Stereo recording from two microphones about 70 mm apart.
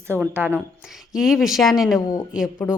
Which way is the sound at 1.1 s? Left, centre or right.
Centre.